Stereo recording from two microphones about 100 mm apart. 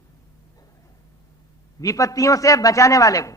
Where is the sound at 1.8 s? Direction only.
35° left (ahead or behind).